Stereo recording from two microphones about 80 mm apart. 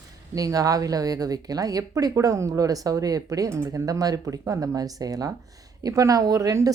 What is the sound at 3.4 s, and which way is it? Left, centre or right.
Speech, right.